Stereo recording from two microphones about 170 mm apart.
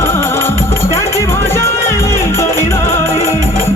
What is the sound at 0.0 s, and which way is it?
Music, 15° left (ahead or behind).